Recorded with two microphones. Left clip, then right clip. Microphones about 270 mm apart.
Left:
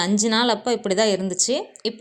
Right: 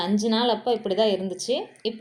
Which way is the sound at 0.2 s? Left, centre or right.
Left.